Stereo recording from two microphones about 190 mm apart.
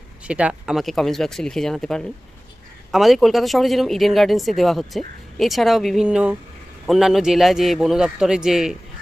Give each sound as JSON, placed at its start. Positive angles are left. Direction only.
{"t": 0.3, "sound": "speech", "side_deg": -5}